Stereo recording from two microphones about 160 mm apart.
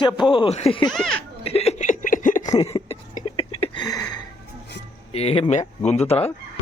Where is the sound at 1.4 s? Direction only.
40° left (ahead or behind).